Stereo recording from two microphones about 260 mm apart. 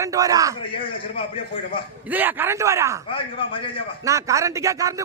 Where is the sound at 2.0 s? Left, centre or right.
Centre.